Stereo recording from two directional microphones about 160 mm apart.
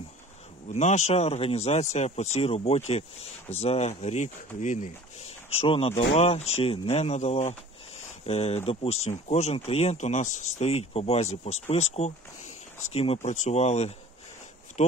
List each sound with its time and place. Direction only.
0.7 s speech: 45° left (ahead or behind)